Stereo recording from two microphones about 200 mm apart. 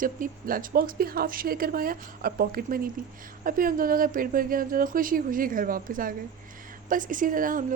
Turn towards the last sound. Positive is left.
turn(degrees=-45)  # may be behind; listen again after turning